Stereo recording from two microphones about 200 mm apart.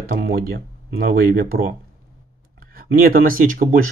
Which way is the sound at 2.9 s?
45° right (ahead or behind).